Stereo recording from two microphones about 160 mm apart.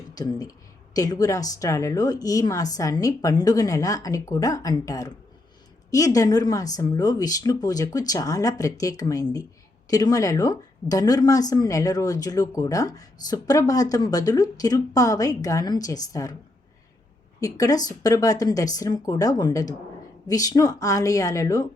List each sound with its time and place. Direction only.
0.2 s a woman's voice: 25° left (ahead or behind)
17.4 s a woman's voice: 20° left (ahead or behind)